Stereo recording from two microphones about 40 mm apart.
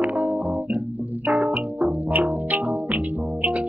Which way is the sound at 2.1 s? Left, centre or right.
Right.